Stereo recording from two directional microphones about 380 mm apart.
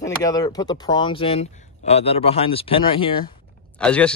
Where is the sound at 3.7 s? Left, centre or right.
Centre.